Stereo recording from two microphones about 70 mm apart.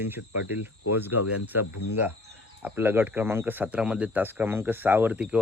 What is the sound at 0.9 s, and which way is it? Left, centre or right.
Speech, right.